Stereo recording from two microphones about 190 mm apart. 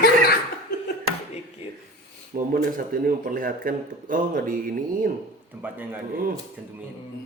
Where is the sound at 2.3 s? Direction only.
50° right (ahead or behind).